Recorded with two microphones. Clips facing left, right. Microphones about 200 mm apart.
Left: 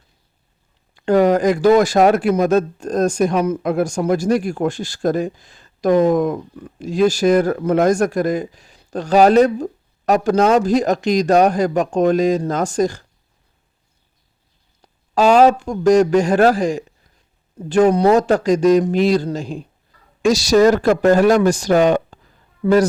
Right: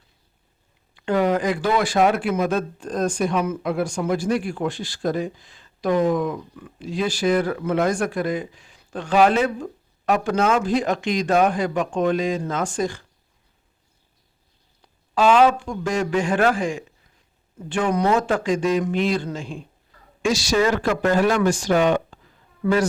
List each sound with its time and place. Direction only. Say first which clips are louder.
0.9 s speech: left 6 dB; 40° left (ahead or behind)
14.8 s a man's voice: left 4 dB; 40° left (ahead or behind)
22.6 s speech: left 6 dB; 25° left (ahead or behind)